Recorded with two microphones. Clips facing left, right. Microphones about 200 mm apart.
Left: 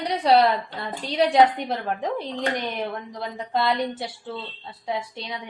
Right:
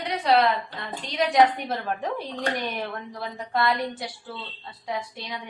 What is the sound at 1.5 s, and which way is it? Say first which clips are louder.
A woman's voice: left 2 dB; 20° left (ahead or behind).